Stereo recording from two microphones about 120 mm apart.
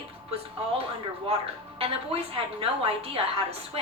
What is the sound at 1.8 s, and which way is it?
A woman's voice, 55° right (ahead or behind).